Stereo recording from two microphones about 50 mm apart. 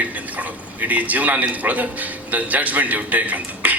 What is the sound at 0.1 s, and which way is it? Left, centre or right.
A man's voice, right.